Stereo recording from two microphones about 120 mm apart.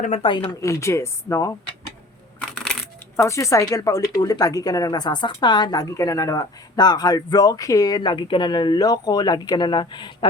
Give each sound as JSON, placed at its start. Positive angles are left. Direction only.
{"t": 0.2, "sound": "speech", "side_deg": 45}
{"t": 0.6, "sound": "speech", "side_deg": 25}
{"t": 3.2, "sound": "a woman's voice", "side_deg": 25}